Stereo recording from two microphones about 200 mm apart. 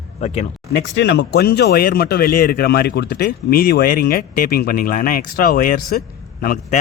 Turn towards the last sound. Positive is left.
turn(degrees=45)  # may be behind; listen again after turning